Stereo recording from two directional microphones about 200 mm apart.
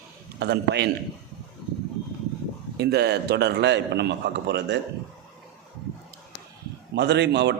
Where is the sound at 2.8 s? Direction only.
55° right (ahead or behind).